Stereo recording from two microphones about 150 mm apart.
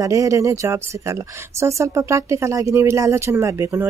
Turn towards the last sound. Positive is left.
turn(degrees=-20)  # may be behind; listen again after turning